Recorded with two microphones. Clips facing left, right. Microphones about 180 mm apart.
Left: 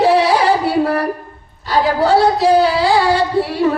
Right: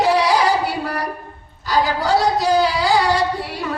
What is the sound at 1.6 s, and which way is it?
Child singing, 30° left (ahead or behind).